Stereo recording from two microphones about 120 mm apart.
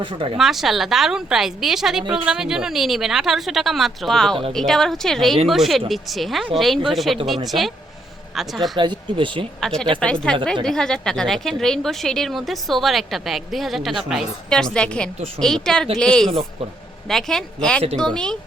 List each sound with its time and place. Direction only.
0.0 s speech: 45° right (ahead or behind)
0.3 s a woman's voice: centre (ahead or behind)
8.7 s speech: 40° right (ahead or behind)
9.6 s a woman's voice: 5° left (ahead or behind)